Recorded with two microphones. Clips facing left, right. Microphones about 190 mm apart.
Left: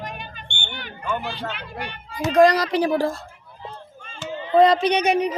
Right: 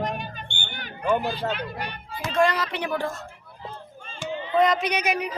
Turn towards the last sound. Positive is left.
turn(degrees=30)  # may be behind; listen again after turning